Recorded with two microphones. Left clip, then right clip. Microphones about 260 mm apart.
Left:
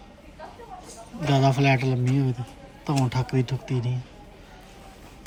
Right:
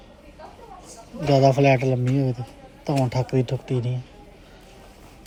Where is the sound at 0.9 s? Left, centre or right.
Centre.